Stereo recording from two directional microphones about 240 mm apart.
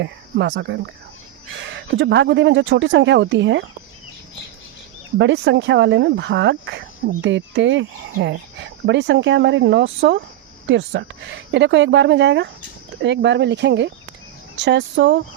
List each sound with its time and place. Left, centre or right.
0.0 s speech: right
5.1 s speech: right